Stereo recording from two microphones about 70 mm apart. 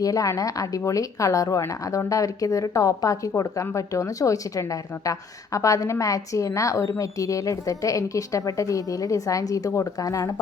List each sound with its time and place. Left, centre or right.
0.0 s a woman's voice: left